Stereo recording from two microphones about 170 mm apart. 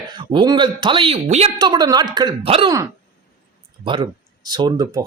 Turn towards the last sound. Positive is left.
turn(degrees=-25)  # may be behind; listen again after turning